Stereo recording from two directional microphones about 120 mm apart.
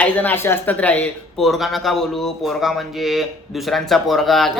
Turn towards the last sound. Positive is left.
turn(degrees=0)  # may be behind; listen again after turning